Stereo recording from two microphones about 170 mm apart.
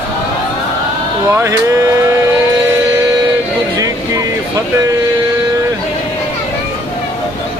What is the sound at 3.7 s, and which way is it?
Vehicle, 20° right (ahead or behind).